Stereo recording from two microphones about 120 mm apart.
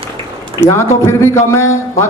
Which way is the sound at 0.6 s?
25° left (ahead or behind).